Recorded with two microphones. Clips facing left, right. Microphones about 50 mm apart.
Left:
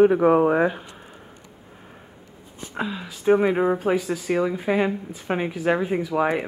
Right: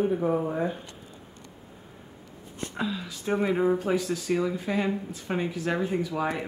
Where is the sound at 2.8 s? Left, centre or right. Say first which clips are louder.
Left 3 dB; left.